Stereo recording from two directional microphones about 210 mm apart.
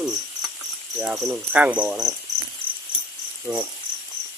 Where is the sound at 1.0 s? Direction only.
10° right (ahead or behind).